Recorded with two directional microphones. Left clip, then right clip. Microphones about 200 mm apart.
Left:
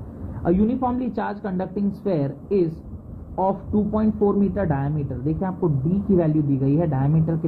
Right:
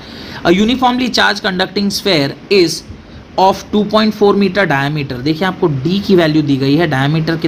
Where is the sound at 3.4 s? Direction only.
45° right (ahead or behind).